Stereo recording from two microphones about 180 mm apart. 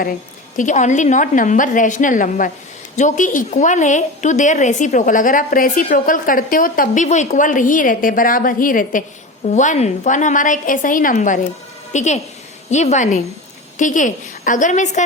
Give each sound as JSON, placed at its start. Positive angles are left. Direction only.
{"t": 0.5, "sound": "a woman's voice", "side_deg": 45}